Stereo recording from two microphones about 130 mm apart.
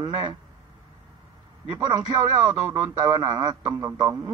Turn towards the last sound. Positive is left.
turn(degrees=-30)  # may be behind; listen again after turning